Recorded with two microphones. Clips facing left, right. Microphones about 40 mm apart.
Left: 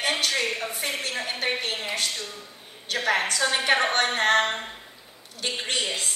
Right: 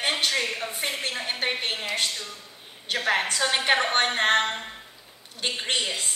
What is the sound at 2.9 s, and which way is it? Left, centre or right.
A woman's voice, right.